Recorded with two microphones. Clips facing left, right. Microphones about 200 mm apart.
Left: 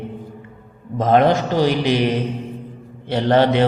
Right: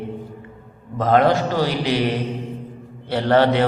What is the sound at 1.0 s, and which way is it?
Mantra, 20° left (ahead or behind).